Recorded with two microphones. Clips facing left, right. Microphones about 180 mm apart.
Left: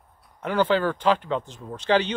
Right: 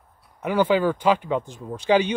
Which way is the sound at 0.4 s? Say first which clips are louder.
Right 2 dB; 10° right (ahead or behind).